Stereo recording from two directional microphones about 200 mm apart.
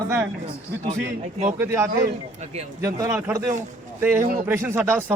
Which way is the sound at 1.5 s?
15° right (ahead or behind).